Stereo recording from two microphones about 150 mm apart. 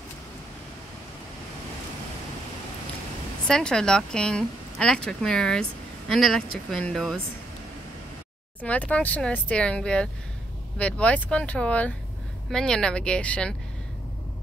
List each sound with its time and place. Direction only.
3.4 s a woman's voice: 5° left (ahead or behind)
8.5 s a woman's voice: 10° left (ahead or behind)